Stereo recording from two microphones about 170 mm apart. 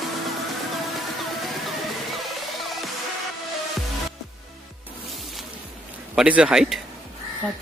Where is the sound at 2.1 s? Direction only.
Centre (ahead or behind).